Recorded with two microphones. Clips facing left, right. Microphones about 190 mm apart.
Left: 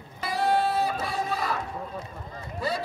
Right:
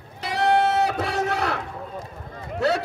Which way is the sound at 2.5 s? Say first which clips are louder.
Right 8 dB; 75° right (ahead or behind).